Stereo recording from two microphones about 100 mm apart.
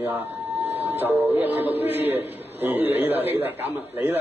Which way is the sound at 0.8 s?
20° right (ahead or behind).